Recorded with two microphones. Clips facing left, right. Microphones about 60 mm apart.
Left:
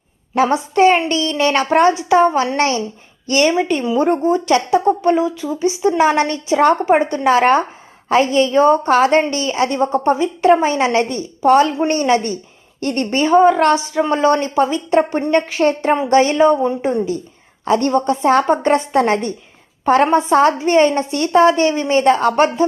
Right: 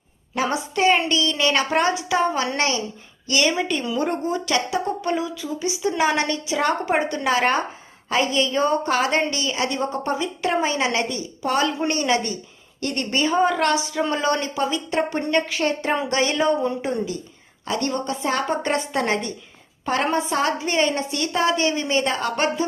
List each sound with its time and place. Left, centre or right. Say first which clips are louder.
0.3 s a woman's voice: left 9 dB; left